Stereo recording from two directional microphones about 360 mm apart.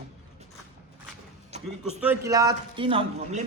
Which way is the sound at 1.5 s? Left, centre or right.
Centre.